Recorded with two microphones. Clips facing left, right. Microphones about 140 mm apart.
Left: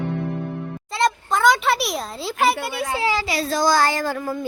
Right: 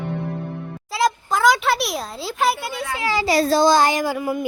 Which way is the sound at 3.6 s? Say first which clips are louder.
Right 3 dB; 20° right (ahead or behind).